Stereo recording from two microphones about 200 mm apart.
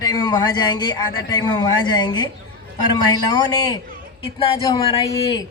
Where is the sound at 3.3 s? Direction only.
20° left (ahead or behind).